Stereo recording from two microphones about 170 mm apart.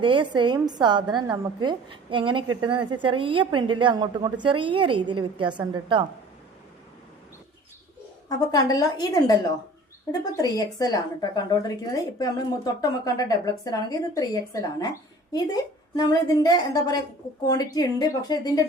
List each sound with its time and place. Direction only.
0.0 s a woman's voice: 30° right (ahead or behind)
8.3 s speech: 20° left (ahead or behind)